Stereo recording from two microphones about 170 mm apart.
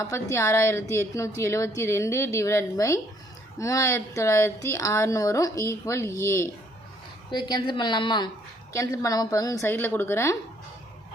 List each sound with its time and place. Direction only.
0.0 s a woman's voice: 15° left (ahead or behind)